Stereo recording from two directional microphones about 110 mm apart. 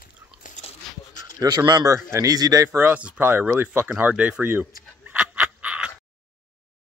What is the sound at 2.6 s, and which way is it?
Speech, 15° right (ahead or behind).